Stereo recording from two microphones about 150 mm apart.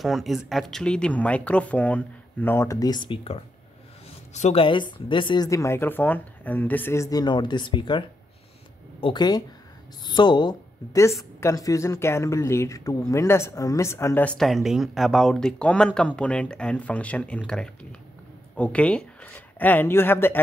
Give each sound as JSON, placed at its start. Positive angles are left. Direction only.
{"t": 0.0, "sound": "speech", "side_deg": 0}
{"t": 2.6, "sound": "speech", "side_deg": 25}
{"t": 4.3, "sound": "a woman's voice", "side_deg": 50}
{"t": 4.6, "sound": "speech", "side_deg": 35}
{"t": 9.0, "sound": "speech", "side_deg": 30}
{"t": 18.6, "sound": "speech", "side_deg": 10}